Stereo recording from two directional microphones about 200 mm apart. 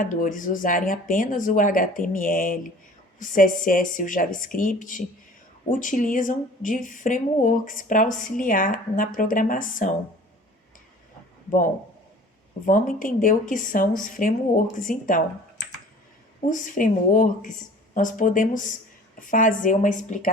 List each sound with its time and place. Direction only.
0.0 s speech: 40° left (ahead or behind)
12.6 s speech: 40° left (ahead or behind)
16.5 s speech: 40° left (ahead or behind)